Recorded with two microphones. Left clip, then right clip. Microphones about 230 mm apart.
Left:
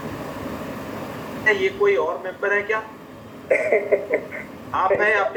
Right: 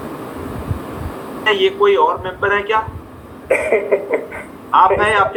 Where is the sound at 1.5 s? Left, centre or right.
Right.